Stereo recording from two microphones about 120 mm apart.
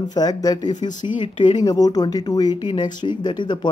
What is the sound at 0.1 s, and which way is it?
Speech, 35° left (ahead or behind).